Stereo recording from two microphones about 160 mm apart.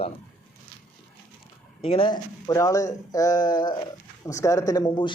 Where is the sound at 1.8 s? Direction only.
35° left (ahead or behind).